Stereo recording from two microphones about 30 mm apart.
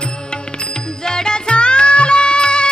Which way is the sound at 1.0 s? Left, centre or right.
Left.